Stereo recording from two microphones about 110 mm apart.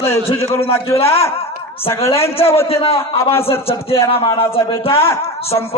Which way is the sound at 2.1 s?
65° left (ahead or behind).